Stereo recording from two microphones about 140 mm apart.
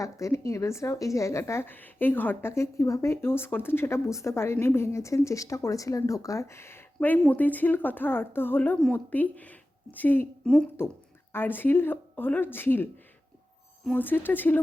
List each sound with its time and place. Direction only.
0.0 s a woman's voice: 20° left (ahead or behind)
13.9 s speech: 15° left (ahead or behind)